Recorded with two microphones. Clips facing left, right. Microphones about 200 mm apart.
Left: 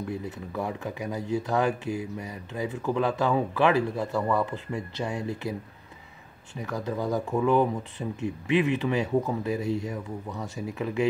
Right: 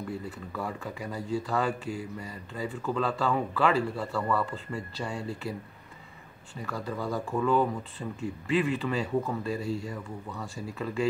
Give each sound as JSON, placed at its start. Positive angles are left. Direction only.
{"t": 0.1, "sound": "speech", "side_deg": 20}
{"t": 6.6, "sound": "speech", "side_deg": 20}